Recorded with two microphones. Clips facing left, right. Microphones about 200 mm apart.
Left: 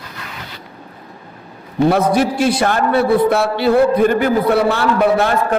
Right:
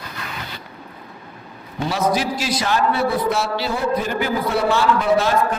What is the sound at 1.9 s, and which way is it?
A man's voice, 55° left (ahead or behind).